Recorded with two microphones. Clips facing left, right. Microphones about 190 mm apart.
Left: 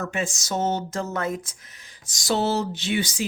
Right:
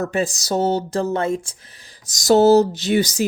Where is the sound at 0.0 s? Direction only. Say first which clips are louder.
Right 7 dB; 35° right (ahead or behind).